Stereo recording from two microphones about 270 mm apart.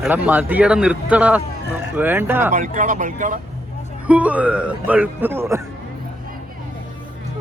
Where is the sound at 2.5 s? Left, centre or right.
Right.